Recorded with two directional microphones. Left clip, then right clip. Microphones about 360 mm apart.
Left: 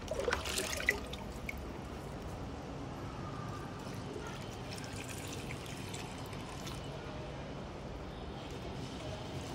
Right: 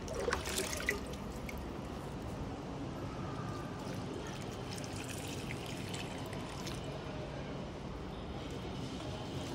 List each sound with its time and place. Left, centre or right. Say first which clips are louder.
0.2 s boat: even; centre